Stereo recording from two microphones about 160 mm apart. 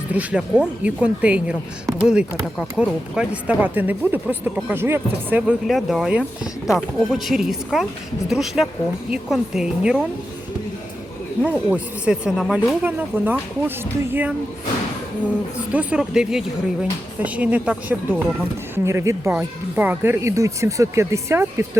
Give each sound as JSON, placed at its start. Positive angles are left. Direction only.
{"t": 0.1, "sound": "speech", "side_deg": -10}
{"t": 5.6, "sound": "a woman's voice", "side_deg": 0}
{"t": 11.4, "sound": "speech", "side_deg": -10}
{"t": 15.7, "sound": "a woman's voice", "side_deg": -10}